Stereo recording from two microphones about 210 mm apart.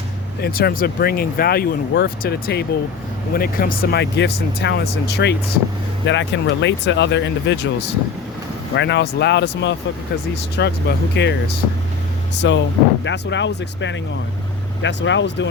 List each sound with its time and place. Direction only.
0.4 s speech: 45° left (ahead or behind)